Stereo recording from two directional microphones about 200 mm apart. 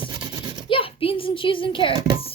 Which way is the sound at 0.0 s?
20° right (ahead or behind).